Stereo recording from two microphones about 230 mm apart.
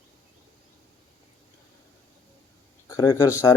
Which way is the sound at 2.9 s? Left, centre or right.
Centre.